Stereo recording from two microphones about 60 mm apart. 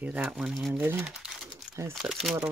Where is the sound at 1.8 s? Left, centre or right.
Right.